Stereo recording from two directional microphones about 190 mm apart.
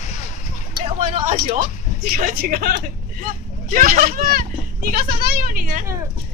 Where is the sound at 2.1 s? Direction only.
50° right (ahead or behind).